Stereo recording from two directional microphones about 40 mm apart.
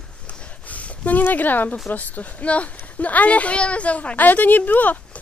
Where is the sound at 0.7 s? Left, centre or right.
Left.